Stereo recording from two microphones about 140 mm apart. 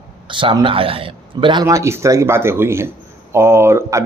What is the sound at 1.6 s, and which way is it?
A man's voice, 20° right (ahead or behind).